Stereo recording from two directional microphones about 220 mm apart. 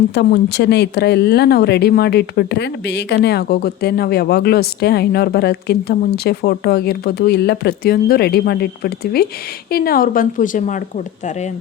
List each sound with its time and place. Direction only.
0.1 s a woman's voice: 50° left (ahead or behind)